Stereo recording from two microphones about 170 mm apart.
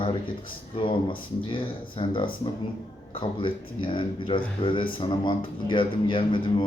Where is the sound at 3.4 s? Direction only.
30° left (ahead or behind).